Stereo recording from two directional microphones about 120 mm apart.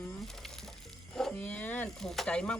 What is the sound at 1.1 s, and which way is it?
Speech, 10° left (ahead or behind).